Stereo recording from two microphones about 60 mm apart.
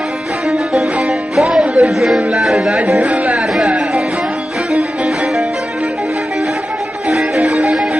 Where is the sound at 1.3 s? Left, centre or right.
Centre.